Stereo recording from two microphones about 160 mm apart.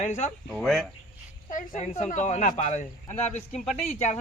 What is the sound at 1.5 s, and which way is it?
Speech, 50° left (ahead or behind).